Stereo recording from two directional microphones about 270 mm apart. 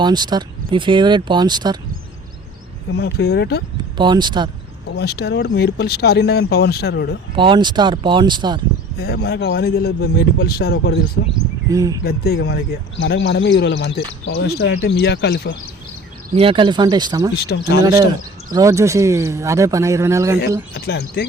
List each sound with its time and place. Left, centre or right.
0.0 s speech: centre
2.9 s speech: left
3.9 s speech: centre
4.9 s speech: left
7.3 s speech: centre
9.0 s speech: left
11.7 s speech: centre
12.0 s speech: left
16.3 s speech: centre
17.3 s speech: left
18.5 s speech: centre
20.7 s speech: left